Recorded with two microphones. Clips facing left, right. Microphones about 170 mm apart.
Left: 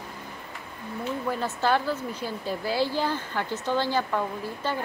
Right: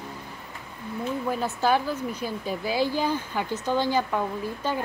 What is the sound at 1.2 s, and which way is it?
Speech, 10° right (ahead or behind).